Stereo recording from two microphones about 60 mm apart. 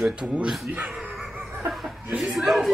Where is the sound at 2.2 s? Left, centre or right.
Centre.